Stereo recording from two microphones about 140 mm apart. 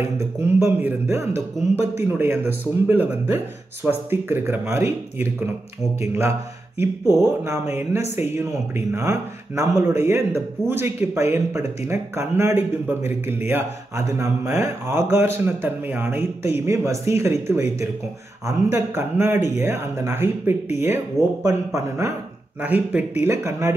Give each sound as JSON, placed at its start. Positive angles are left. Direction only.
{"t": 0.0, "sound": "speech", "side_deg": -15}
{"t": 5.9, "sound": "speech", "side_deg": -20}
{"t": 22.6, "sound": "speech", "side_deg": -10}